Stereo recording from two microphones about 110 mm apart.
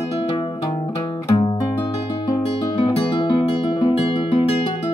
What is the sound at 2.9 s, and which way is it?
Music, 55° left (ahead or behind).